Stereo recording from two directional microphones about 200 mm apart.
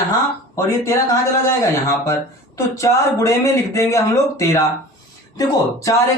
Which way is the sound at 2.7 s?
15° left (ahead or behind).